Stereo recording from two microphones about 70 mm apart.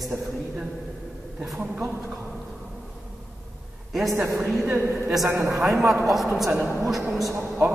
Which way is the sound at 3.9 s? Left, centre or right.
Centre.